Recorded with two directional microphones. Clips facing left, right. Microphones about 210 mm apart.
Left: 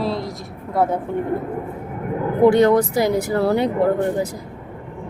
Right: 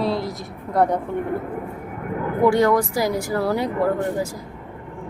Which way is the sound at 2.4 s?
20° left (ahead or behind).